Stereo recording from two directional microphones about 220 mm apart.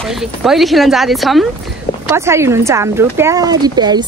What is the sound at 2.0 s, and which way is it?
Speech, 10° right (ahead or behind).